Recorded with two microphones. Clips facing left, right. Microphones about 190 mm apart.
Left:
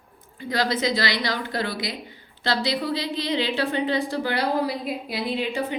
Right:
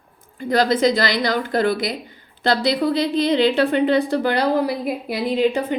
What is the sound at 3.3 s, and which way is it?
Speech, 55° right (ahead or behind).